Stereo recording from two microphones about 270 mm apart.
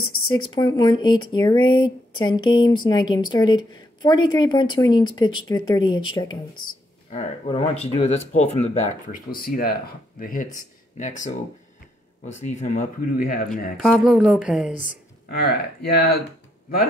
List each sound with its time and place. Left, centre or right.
0.1 s a sound: left
0.5 s speech: centre
12.4 s speech: left
13.7 s speech: centre
14.7 s speech: left